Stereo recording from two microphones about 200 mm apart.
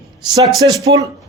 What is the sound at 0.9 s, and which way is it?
Speech, 25° right (ahead or behind).